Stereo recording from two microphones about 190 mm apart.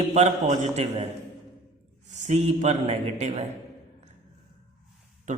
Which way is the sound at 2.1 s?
35° right (ahead or behind).